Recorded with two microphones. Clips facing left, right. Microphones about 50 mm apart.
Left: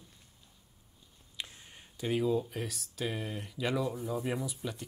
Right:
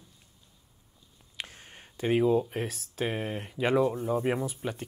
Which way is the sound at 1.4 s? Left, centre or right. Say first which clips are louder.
Right 3 dB; right.